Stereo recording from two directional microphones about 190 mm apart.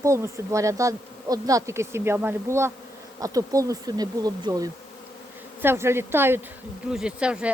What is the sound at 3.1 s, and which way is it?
Bee, 20° right (ahead or behind).